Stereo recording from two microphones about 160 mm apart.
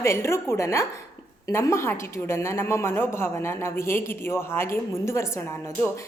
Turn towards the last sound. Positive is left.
turn(degrees=15)  # may be behind; listen again after turning